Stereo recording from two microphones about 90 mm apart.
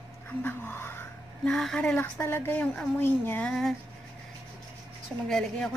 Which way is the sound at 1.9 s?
25° left (ahead or behind).